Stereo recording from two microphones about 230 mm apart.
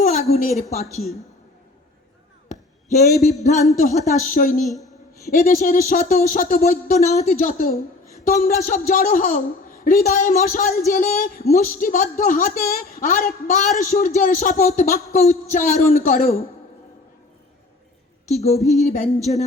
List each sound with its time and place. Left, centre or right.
0.0 s a woman's voice: left
3.2 s a woman's voice: centre
3.4 s speech: left
4.6 s a woman's voice: centre
5.3 s speech: left
18.3 s a sound: left
18.6 s a woman's voice: centre